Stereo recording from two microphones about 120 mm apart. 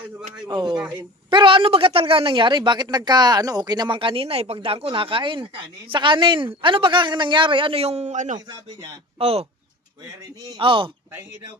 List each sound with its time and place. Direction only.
0.4 s speech: 40° right (ahead or behind); by 8.4 s 90° right
9.1 s speech: 55° right (ahead or behind)
10.6 s speech: 45° right (ahead or behind)